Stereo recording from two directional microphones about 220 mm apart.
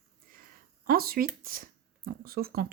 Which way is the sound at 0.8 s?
45° right (ahead or behind).